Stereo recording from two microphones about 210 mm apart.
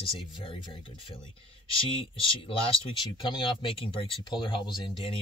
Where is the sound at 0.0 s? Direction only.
25° left (ahead or behind).